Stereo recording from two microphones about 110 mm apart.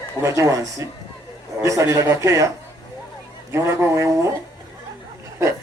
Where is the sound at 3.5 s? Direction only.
25° right (ahead or behind).